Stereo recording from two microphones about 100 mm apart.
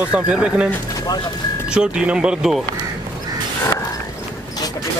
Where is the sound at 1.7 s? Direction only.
10° right (ahead or behind).